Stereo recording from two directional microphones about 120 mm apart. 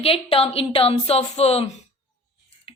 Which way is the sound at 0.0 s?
50° left (ahead or behind).